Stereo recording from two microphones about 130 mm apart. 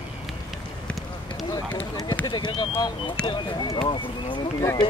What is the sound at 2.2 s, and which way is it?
Speech, 35° left (ahead or behind).